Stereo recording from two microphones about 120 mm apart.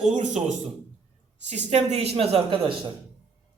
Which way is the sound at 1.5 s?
65° right (ahead or behind).